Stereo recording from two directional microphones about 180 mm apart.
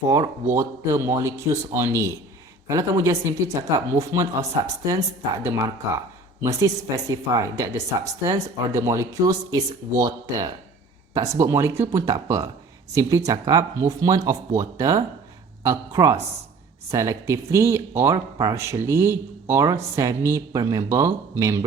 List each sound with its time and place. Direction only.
0.1 s speech: 15° right (ahead or behind)